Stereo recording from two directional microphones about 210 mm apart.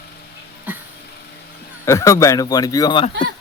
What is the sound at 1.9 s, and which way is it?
Speech, 15° left (ahead or behind).